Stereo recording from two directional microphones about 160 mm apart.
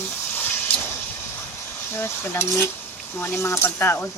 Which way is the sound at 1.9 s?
15° left (ahead or behind).